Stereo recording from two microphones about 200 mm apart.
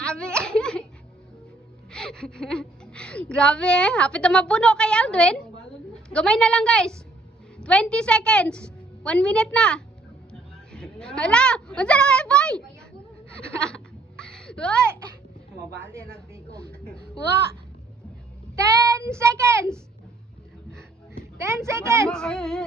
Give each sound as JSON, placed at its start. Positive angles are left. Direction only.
{"t": 0.0, "sound": "a sound", "side_deg": 5}
{"t": 1.9, "sound": "a woman's voice", "side_deg": 5}
{"t": 13.6, "sound": "a sound", "side_deg": 5}
{"t": 15.8, "sound": "a woman's voice", "side_deg": -15}
{"t": 18.5, "sound": "a child's voice", "side_deg": -15}
{"t": 21.3, "sound": "a woman's voice", "side_deg": -15}
{"t": 22.1, "sound": "a woman's voice", "side_deg": 5}